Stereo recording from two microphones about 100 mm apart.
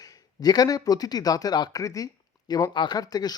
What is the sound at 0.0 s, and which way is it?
A man's voice, 40° left (ahead or behind).